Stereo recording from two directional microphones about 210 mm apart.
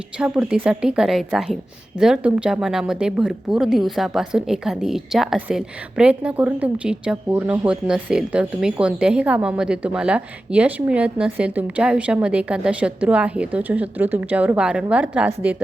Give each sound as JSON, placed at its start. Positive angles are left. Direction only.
{"t": 0.2, "sound": "a woman's voice", "side_deg": -5}